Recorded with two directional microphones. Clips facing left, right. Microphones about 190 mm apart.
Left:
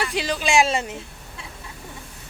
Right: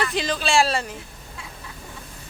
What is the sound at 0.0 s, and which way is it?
Speech, 10° left (ahead or behind).